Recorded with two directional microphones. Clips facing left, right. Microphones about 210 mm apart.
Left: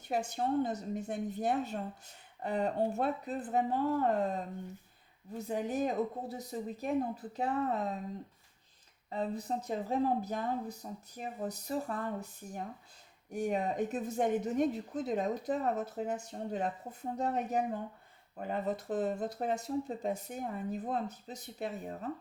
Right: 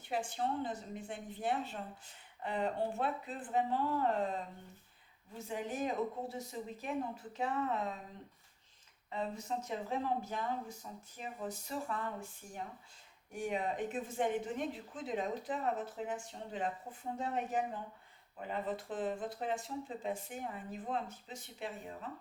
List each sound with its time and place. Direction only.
0.1 s speech: 40° left (ahead or behind)
5.4 s speech: 40° left (ahead or behind)
9.0 s speech: 35° left (ahead or behind)